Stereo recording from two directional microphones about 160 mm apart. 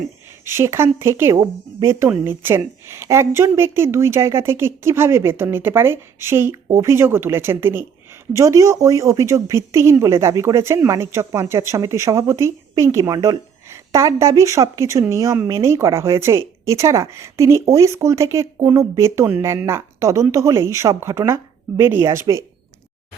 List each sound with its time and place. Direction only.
0.4 s a woman's voice: 15° right (ahead or behind)